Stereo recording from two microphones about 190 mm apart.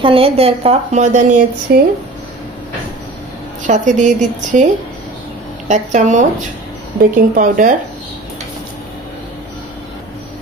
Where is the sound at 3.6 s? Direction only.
40° right (ahead or behind).